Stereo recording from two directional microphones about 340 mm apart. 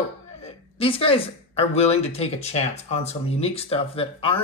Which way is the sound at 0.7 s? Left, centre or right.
Centre.